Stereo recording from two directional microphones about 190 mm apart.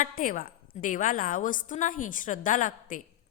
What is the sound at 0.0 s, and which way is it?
A woman's voice, 45° left (ahead or behind).